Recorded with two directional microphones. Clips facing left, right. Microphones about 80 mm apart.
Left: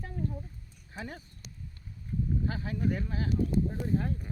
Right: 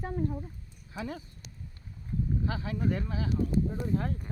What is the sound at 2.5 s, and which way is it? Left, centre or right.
Speech, right.